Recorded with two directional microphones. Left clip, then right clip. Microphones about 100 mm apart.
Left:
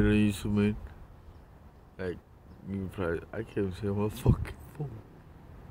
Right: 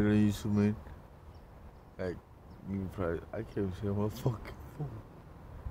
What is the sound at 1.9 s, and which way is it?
Speech, 5° left (ahead or behind).